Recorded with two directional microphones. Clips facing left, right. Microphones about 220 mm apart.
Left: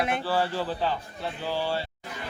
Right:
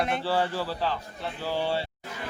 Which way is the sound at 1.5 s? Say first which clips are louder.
Right 1 dB; 20° right (ahead or behind).